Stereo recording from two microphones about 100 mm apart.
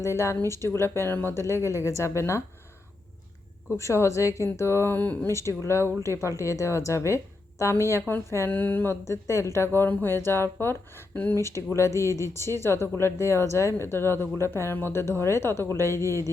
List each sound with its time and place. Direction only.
0.0 s a woman's voice: 30° left (ahead or behind)
3.8 s a woman's voice: 30° left (ahead or behind)
5.3 s a woman's voice: 30° left (ahead or behind)
11.3 s a woman's voice: 25° left (ahead or behind)